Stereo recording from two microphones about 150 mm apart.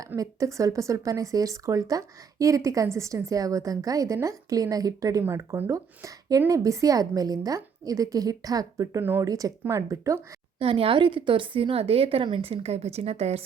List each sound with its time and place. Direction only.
0.2 s speech: 20° right (ahead or behind)
10.6 s a woman's voice: 35° right (ahead or behind)